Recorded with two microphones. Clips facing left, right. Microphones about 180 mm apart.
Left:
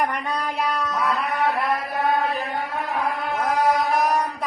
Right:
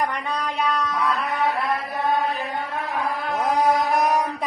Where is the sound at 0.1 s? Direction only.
Centre (ahead or behind).